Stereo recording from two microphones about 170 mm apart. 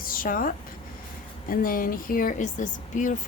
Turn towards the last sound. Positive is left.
turn(degrees=50)  # may be behind; listen again after turning